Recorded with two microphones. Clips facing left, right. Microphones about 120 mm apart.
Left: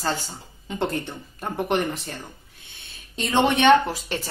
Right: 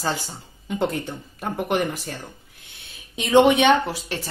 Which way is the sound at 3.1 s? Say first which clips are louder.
Right 5 dB; 10° right (ahead or behind).